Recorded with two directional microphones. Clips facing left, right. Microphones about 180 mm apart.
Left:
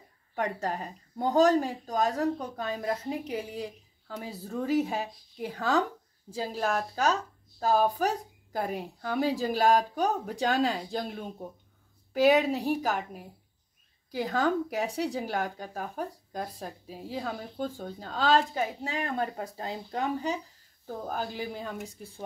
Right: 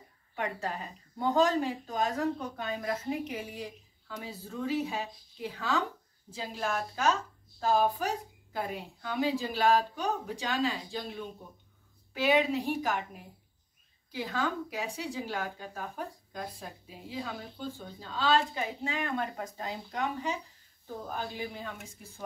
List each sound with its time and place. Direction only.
0.4 s speech: 40° left (ahead or behind)
14.1 s speech: 45° left (ahead or behind)